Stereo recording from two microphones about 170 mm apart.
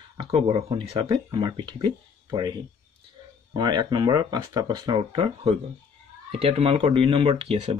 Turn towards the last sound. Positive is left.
turn(degrees=-35)  # may be behind; listen again after turning